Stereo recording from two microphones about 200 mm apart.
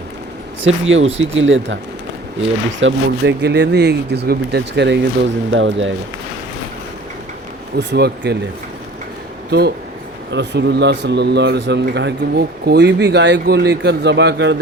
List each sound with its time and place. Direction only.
0.6 s speech: 75° right (ahead or behind)
2.8 s speech: 60° right (ahead or behind)
7.8 s speech: 55° right (ahead or behind)
9.5 s speech: 55° right (ahead or behind)